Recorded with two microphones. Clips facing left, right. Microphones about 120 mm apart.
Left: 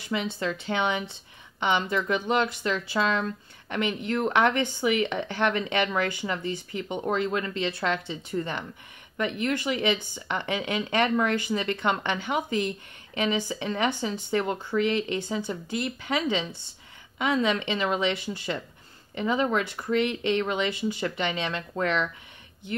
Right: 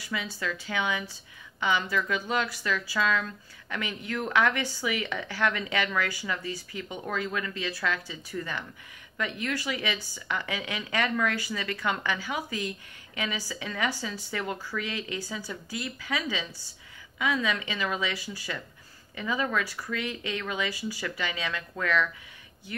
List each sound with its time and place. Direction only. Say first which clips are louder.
0.1 s speech: left 5 dB; 25° left (ahead or behind)